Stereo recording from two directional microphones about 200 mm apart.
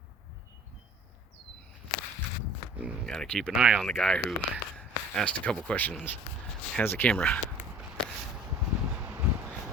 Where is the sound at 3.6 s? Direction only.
5° right (ahead or behind).